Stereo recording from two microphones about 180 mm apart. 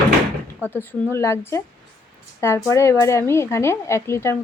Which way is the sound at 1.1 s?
15° left (ahead or behind).